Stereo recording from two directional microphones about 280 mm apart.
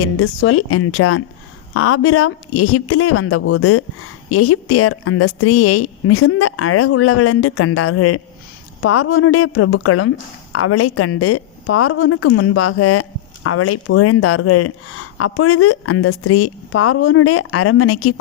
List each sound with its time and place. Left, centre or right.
0.0 s a woman's voice: left